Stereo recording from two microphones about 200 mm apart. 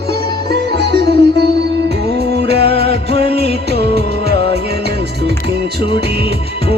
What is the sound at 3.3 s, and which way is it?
Music, 30° left (ahead or behind).